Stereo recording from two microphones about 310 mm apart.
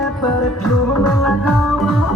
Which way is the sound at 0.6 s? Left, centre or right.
Centre.